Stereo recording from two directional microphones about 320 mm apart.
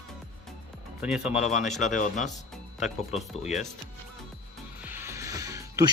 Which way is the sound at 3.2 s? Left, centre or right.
Centre.